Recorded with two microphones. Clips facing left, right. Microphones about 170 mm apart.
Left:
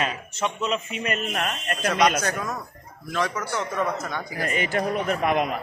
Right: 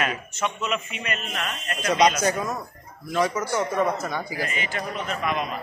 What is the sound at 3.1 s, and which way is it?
Speech, 10° right (ahead or behind).